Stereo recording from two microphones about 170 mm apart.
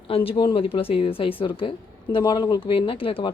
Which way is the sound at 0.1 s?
35° left (ahead or behind).